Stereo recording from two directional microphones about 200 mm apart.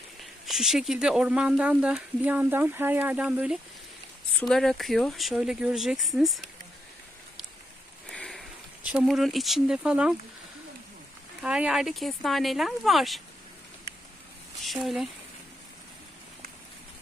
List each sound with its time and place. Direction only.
0.2 s speech: centre (ahead or behind)
8.1 s speech: 5° left (ahead or behind)
11.4 s speech: 5° right (ahead or behind)
14.6 s speech: centre (ahead or behind)